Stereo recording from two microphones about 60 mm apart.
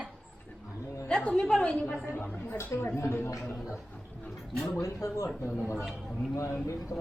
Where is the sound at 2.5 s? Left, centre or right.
Left.